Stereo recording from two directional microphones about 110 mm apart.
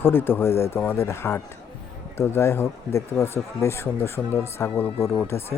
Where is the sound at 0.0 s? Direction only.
20° left (ahead or behind).